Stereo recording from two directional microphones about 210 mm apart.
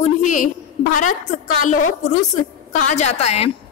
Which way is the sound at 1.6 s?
40° left (ahead or behind).